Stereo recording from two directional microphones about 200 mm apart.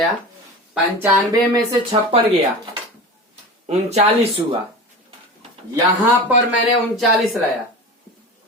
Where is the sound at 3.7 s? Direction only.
30° right (ahead or behind).